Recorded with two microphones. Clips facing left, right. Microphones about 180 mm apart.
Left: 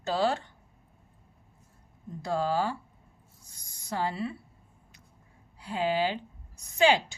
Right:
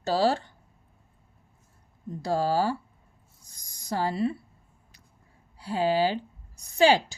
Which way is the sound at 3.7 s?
40° right (ahead or behind).